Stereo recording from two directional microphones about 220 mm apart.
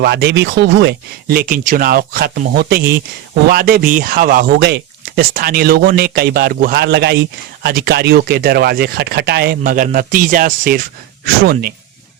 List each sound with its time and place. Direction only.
0.0 s speech: 45° right (ahead or behind)